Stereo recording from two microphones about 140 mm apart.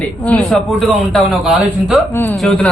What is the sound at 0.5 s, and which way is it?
Speech, centre (ahead or behind).